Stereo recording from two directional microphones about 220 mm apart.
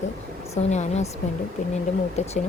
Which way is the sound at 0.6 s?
30° left (ahead or behind).